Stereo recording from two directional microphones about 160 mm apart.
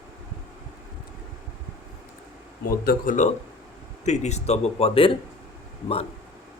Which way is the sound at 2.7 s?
65° left (ahead or behind).